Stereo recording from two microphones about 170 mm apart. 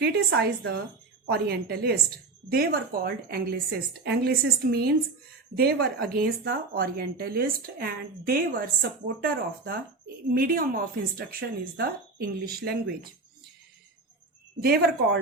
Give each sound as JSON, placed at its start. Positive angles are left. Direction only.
{"t": 0.0, "sound": "a woman's voice", "side_deg": -70}
{"t": 10.3, "sound": "speech", "side_deg": -55}
{"t": 14.6, "sound": "speech", "side_deg": -65}